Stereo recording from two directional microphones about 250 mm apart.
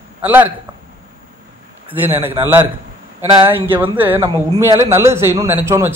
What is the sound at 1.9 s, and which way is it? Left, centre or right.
Speech, centre.